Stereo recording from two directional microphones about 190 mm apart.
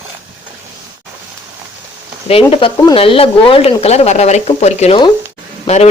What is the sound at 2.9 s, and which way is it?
Speech, 30° left (ahead or behind).